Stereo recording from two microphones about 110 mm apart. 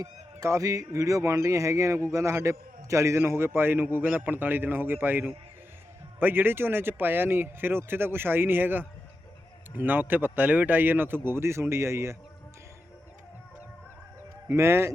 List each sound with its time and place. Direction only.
0.0 s a man's voice: 30° right (ahead or behind)
14.4 s a man's voice: 25° right (ahead or behind)